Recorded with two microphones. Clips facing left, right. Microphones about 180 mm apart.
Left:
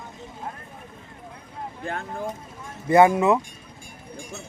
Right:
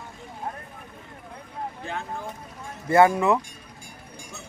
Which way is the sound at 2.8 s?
20° left (ahead or behind).